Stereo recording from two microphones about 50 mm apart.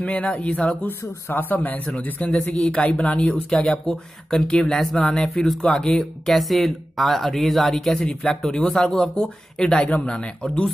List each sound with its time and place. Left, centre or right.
0.0 s a man's voice: left
0.8 s a man's voice: left
4.5 s speech: centre
6.2 s a man's voice: centre; by 10.7 s left